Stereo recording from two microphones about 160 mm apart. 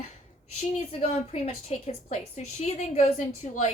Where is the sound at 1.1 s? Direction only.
40° left (ahead or behind).